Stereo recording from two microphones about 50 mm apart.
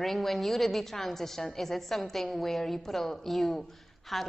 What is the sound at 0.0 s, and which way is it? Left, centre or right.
A woman's voice, centre.